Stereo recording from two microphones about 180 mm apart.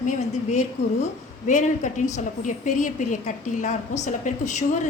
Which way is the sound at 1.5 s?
45° left (ahead or behind).